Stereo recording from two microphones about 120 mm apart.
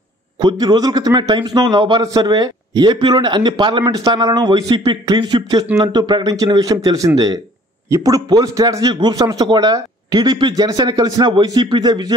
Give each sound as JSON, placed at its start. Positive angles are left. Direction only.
{"t": 0.4, "sound": "a man's voice", "side_deg": -35}